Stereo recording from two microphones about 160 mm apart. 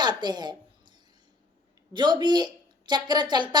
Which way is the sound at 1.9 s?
30° right (ahead or behind).